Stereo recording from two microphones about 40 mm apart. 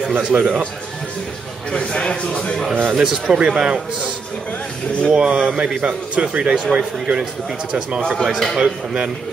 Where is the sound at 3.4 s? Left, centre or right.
Right.